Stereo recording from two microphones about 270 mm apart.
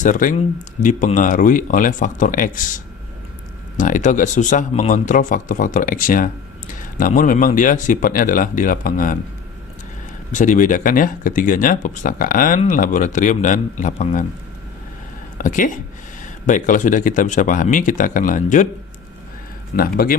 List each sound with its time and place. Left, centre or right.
0.0 s speech: left
10.3 s speech: left
15.4 s speech: left